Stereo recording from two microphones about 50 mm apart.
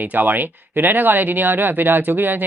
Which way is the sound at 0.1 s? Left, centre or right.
Right.